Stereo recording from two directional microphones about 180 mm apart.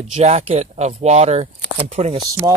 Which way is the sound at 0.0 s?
35° right (ahead or behind).